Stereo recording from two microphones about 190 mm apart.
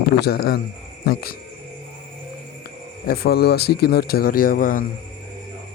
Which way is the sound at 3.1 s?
55° left (ahead or behind).